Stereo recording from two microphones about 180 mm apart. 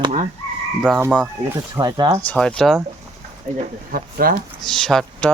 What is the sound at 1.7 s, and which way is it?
Speech, 20° right (ahead or behind).